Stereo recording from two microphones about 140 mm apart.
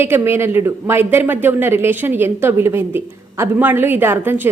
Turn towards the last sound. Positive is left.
turn(degrees=-15)  # may be behind; listen again after turning